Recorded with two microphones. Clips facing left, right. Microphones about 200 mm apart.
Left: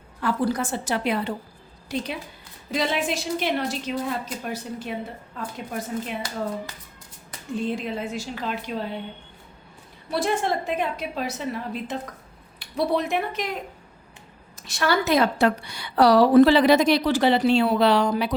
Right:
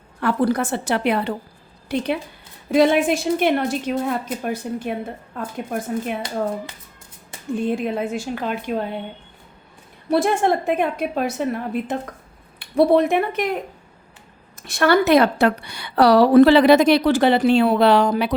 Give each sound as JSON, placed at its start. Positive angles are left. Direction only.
{"t": 0.2, "sound": "a woman's voice", "side_deg": -60}
{"t": 7.5, "sound": "a woman's voice", "side_deg": -55}
{"t": 10.1, "sound": "a woman's voice", "side_deg": -55}
{"t": 14.6, "sound": "a woman's voice", "side_deg": -55}